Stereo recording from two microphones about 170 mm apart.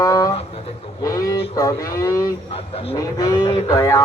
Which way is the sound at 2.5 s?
35° left (ahead or behind).